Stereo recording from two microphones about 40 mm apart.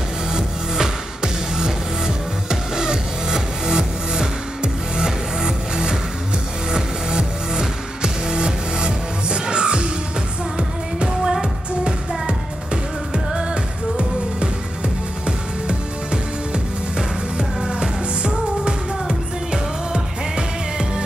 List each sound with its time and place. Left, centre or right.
0.3 s music: centre
11.0 s music: centre
13.1 s music: centre
17.4 s music: right